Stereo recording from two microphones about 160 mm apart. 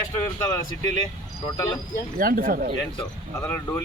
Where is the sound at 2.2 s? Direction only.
65° right (ahead or behind).